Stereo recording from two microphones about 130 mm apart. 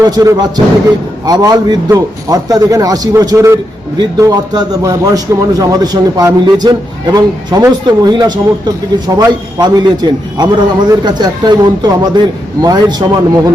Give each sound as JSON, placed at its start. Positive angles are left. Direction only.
{"t": 0.0, "sound": "a man's voice", "side_deg": -30}